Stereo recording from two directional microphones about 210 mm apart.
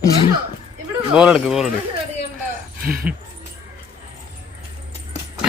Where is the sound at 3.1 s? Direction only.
5° right (ahead or behind).